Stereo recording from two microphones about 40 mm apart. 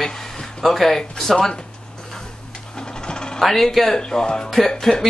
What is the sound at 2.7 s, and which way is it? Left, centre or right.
Sewing machine, left.